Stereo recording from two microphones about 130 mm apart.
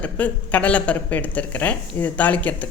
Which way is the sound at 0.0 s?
10° left (ahead or behind).